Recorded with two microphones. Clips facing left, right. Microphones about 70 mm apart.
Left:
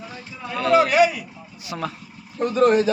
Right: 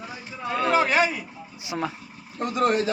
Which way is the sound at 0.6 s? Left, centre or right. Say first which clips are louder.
Left 5 dB; right.